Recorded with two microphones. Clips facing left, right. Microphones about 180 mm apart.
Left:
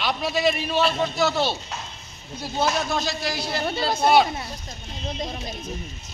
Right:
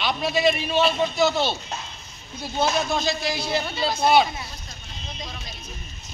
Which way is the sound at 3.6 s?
45° left (ahead or behind).